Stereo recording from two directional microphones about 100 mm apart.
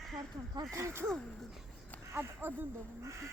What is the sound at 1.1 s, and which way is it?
Speech, 5° left (ahead or behind).